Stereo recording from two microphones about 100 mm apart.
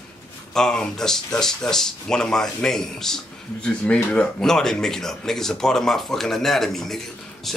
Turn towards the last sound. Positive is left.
turn(degrees=5)  # may be behind; listen again after turning